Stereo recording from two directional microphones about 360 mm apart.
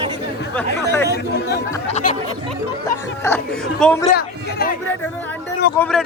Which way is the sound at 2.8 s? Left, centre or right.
Centre.